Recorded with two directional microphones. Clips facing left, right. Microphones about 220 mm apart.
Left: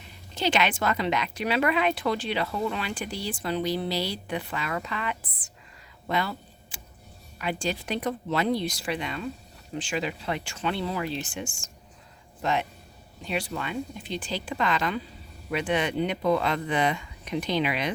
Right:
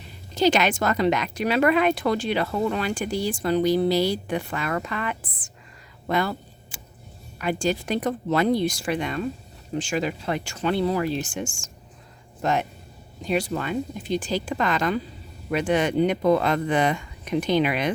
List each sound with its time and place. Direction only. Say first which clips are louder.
0.3 s speech: right 5 dB; 40° right (ahead or behind)
6.1 s a sound: right 4 dB; 50° right (ahead or behind)
7.3 s speech: right 5 dB; 45° right (ahead or behind)